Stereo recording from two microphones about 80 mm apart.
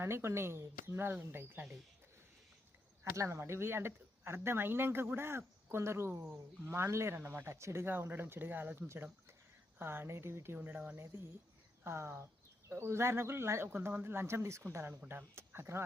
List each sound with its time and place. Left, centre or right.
0.0 s speech: right
3.0 s speech: right
10.9 s speech: right